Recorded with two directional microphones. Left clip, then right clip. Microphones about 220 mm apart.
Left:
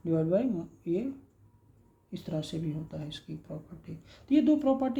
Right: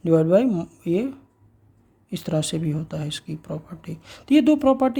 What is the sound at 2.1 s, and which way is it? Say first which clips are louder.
Speech: right 11 dB; 40° right (ahead or behind).